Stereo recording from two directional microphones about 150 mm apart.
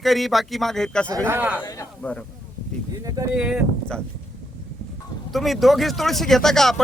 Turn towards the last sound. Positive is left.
turn(degrees=5)  # may be behind; listen again after turning